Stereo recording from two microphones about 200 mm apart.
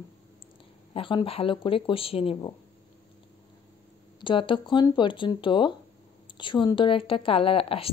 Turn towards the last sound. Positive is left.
turn(degrees=25)  # may be behind; listen again after turning